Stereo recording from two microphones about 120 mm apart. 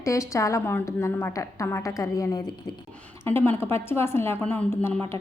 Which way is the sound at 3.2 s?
20° left (ahead or behind).